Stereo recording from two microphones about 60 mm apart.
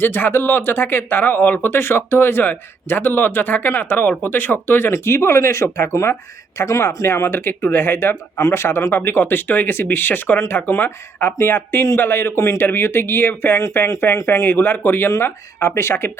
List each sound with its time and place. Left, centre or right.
0.0 s speech: left
8.4 s speech: left
8.6 s speech: left
12.4 s speech: left
12.6 s speech: left
15.1 s speech: left